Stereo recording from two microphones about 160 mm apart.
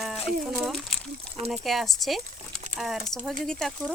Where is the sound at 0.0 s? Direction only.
Centre (ahead or behind).